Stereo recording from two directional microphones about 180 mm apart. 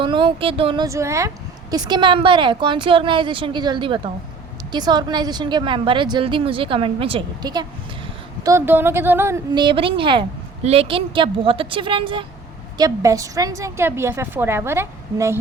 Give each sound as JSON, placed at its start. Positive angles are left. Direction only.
{"t": 0.0, "sound": "a woman's voice", "side_deg": -25}
{"t": 0.9, "sound": "a woman's voice", "side_deg": -15}
{"t": 8.4, "sound": "a woman's voice", "side_deg": -15}
{"t": 9.6, "sound": "a woman's voice", "side_deg": -30}